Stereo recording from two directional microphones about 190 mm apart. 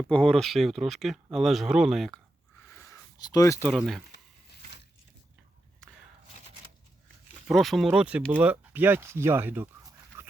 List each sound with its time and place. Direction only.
0.1 s speech: 5° left (ahead or behind)
2.6 s a sound: 15° left (ahead or behind)
3.7 s speech: centre (ahead or behind)
7.4 s speech: centre (ahead or behind)
10.1 s dog: 15° right (ahead or behind)